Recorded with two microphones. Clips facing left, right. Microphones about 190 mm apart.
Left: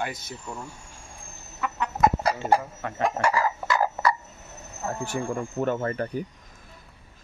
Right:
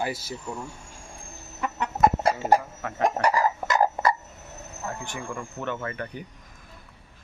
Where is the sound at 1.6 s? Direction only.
30° right (ahead or behind).